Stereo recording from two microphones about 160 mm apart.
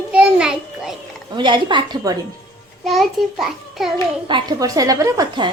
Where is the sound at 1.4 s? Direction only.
30° right (ahead or behind).